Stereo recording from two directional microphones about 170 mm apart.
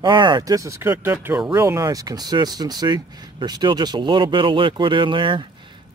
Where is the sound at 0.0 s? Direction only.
25° right (ahead or behind).